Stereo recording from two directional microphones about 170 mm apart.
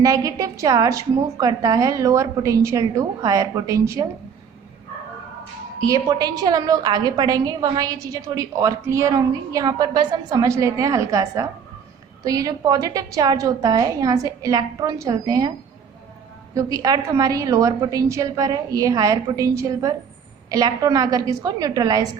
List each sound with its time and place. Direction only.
0.0 s a woman's voice: 20° right (ahead or behind)
5.8 s a woman's voice: 20° right (ahead or behind)
16.6 s a woman's voice: 20° right (ahead or behind)